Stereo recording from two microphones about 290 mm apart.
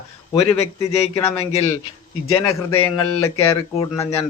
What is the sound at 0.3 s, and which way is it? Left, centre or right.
A man's voice, left.